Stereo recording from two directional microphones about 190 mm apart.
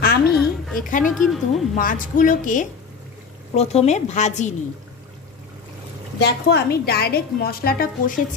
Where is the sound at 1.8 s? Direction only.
45° left (ahead or behind).